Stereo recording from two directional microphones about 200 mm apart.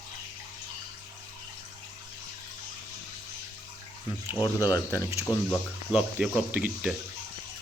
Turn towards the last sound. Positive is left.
turn(degrees=-5)  # may be behind; listen again after turning